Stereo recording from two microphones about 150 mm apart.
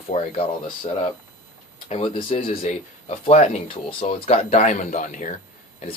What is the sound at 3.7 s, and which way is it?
Speech, 35° left (ahead or behind).